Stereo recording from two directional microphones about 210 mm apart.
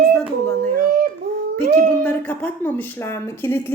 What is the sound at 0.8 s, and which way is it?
Speech, 40° right (ahead or behind).